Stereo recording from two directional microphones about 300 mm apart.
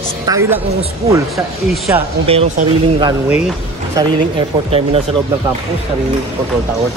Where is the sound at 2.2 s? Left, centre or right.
Right.